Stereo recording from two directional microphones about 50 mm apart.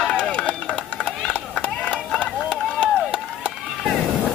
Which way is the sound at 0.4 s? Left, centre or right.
Left.